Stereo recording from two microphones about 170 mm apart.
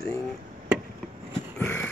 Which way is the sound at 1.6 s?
10° left (ahead or behind).